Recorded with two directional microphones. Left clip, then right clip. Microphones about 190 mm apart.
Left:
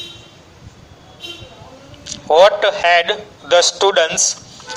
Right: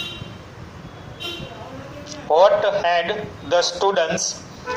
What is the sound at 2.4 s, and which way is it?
A man's voice, 55° left (ahead or behind).